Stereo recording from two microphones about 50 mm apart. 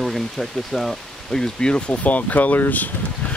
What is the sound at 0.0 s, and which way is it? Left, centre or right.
Speech, centre.